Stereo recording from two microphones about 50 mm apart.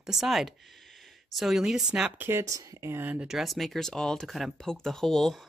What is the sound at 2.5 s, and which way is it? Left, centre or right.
Speech, right.